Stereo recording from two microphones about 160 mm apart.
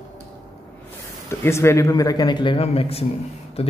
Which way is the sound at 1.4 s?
15° left (ahead or behind).